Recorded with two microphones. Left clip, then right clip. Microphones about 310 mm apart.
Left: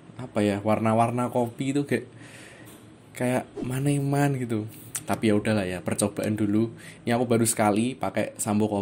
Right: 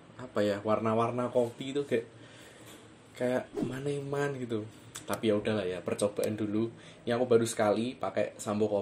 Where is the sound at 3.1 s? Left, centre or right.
Left.